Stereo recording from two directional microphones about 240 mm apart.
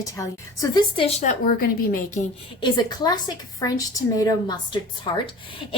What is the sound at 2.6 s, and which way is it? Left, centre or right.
A woman's voice, centre.